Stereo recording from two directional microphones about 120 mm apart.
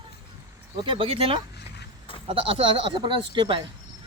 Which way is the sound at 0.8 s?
45° right (ahead or behind).